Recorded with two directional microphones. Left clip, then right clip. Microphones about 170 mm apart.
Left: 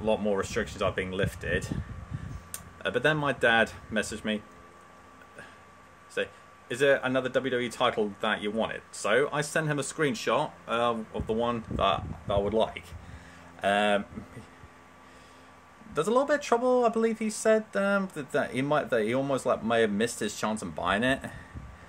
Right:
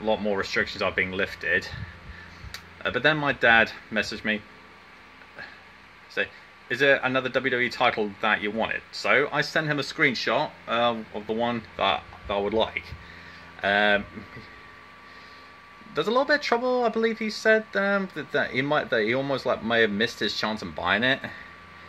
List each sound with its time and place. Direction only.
0.0 s speech: centre (ahead or behind)
2.8 s speech: 5° right (ahead or behind)
6.7 s speech: centre (ahead or behind)
16.0 s speech: centre (ahead or behind)